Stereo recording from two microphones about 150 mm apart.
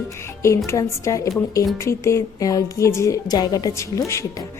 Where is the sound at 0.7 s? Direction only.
20° left (ahead or behind).